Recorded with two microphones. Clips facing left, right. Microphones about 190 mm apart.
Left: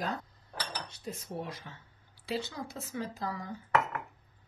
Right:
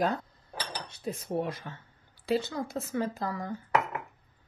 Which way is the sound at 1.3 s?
55° right (ahead or behind).